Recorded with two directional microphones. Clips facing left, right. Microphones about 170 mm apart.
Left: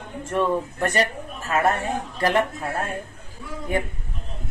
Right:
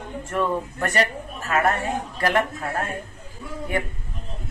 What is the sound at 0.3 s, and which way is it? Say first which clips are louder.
Speech: left 2 dB; 5° left (ahead or behind).